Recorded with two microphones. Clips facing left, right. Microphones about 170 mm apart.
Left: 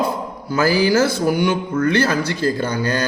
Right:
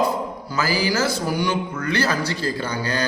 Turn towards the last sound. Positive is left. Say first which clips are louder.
# left 4 dB
turn(degrees=45)  # may be behind; listen again after turning